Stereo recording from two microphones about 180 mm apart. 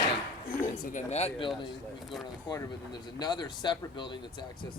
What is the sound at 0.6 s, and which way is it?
Speech, 45° left (ahead or behind).